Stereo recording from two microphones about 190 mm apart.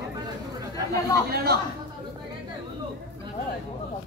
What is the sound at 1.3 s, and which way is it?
Speech, 55° right (ahead or behind).